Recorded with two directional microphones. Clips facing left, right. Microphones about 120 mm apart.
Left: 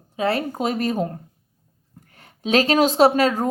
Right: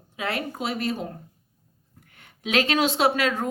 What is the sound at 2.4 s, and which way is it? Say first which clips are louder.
A woman's voice: left 5 dB; 35° left (ahead or behind).